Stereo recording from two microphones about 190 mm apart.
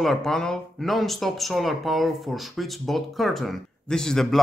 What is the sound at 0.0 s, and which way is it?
Speech, centre (ahead or behind).